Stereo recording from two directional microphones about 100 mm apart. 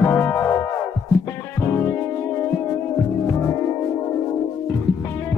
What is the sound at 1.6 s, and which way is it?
Music, 25° left (ahead or behind).